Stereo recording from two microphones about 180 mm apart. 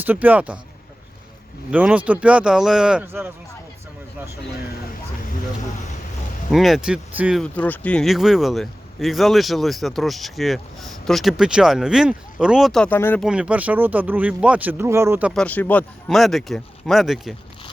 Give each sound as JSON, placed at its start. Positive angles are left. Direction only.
{"t": 0.0, "sound": "speech", "side_deg": -10}
{"t": 1.7, "sound": "speech", "side_deg": -10}
{"t": 6.5, "sound": "speech", "side_deg": 0}
{"t": 7.4, "sound": "speech", "side_deg": 10}
{"t": 13.2, "sound": "speech", "side_deg": -5}
{"t": 15.3, "sound": "speech", "side_deg": 5}